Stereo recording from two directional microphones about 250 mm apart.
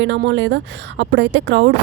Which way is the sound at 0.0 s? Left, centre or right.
Right.